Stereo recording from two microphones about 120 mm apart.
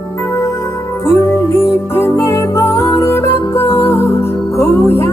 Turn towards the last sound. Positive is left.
turn(degrees=20)  # may be behind; listen again after turning